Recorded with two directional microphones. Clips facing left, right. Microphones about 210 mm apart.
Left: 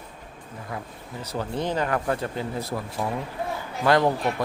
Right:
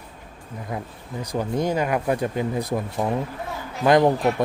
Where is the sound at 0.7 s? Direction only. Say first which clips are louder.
Right 4 dB; 20° right (ahead or behind).